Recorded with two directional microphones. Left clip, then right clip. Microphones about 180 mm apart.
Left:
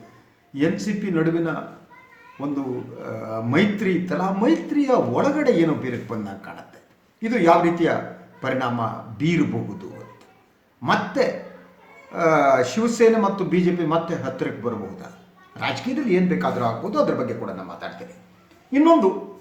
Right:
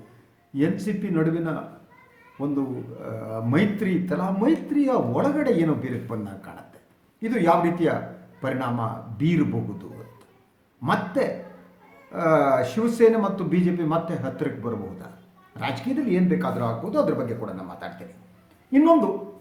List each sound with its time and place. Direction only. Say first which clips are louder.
0.5 s speech: left 2 dB; 10° right (ahead or behind)
2.6 s speech: left 1 dB; 10° right (ahead or behind)
10.8 s speech: left 3 dB; 10° right (ahead or behind)